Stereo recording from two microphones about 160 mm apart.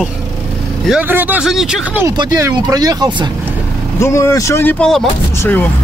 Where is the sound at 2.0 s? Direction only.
25° right (ahead or behind).